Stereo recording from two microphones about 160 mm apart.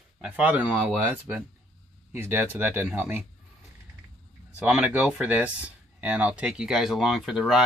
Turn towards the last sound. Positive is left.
turn(degrees=-5)  # may be behind; listen again after turning